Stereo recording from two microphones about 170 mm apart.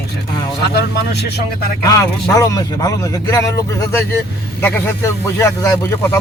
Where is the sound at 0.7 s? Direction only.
75° left (ahead or behind).